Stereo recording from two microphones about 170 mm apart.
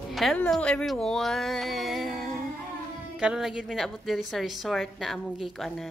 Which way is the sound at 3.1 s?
5° right (ahead or behind).